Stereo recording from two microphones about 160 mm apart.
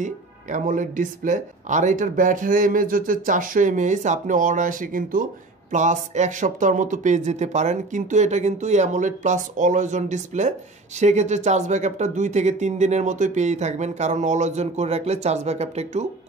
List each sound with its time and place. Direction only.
0.0 s speech: 50° right (ahead or behind)